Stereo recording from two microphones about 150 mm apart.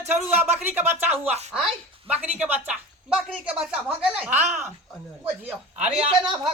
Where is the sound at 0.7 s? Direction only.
15° right (ahead or behind).